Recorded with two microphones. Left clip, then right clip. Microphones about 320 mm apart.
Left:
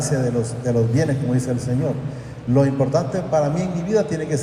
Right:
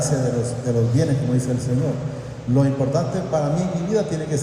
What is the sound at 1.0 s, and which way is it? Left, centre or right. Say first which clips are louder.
Speech: left 1 dB; centre.